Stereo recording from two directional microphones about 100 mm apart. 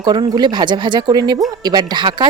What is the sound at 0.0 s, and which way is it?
Speech, 45° right (ahead or behind).